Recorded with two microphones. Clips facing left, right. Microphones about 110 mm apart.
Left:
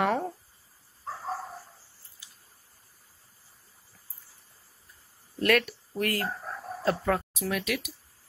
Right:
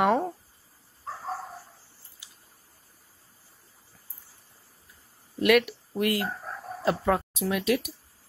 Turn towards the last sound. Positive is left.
turn(degrees=-30)  # may be behind; listen again after turning